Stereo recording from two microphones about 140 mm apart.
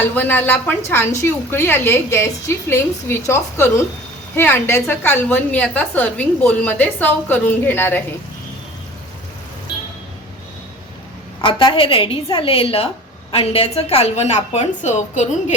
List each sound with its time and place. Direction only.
0.0 s a woman's voice: 15° left (ahead or behind)
11.3 s a woman's voice: 35° left (ahead or behind); by 15.5 s 55° left (ahead or behind)